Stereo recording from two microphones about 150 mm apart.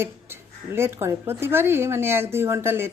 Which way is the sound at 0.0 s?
15° right (ahead or behind).